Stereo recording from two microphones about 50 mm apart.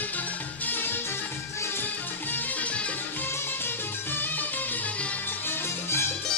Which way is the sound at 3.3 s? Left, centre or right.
Left.